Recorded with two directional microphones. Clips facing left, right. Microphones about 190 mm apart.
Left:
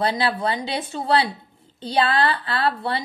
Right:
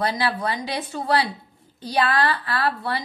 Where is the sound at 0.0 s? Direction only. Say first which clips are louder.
Left 2 dB; 25° left (ahead or behind).